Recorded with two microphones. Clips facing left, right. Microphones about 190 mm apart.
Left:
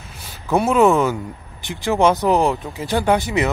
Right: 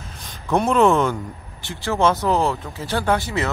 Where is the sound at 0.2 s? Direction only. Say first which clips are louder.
Left 2 dB; 5° left (ahead or behind).